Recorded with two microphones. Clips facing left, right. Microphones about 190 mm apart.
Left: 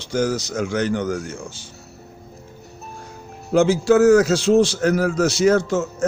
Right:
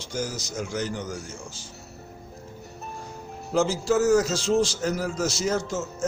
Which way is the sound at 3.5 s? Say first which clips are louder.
Left 8 dB; 65° left (ahead or behind).